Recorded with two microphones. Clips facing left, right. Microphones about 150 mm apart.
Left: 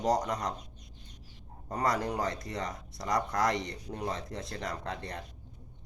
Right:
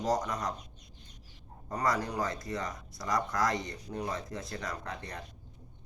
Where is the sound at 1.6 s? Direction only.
30° left (ahead or behind).